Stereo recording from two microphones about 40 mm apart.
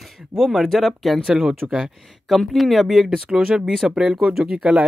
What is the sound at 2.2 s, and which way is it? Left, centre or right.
Speech, centre.